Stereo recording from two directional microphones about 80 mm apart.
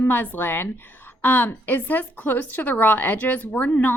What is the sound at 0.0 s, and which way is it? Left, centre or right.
A woman's voice, left.